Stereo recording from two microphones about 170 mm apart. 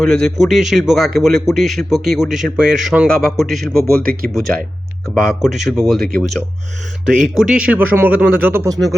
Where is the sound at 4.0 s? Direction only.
60° right (ahead or behind).